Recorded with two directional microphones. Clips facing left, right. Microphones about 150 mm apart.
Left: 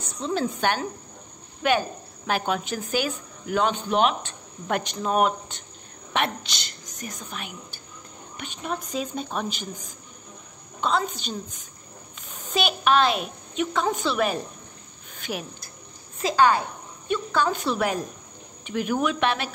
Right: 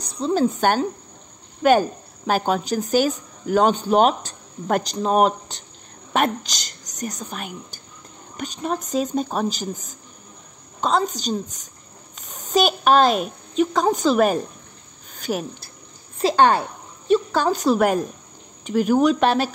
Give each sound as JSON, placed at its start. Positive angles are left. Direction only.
{"t": 0.0, "sound": "a woman's voice", "side_deg": -35}
{"t": 15.1, "sound": "a sound", "side_deg": -40}
{"t": 16.2, "sound": "a woman's voice", "side_deg": -35}